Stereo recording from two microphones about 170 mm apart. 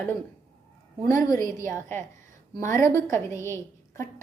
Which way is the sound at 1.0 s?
20° left (ahead or behind).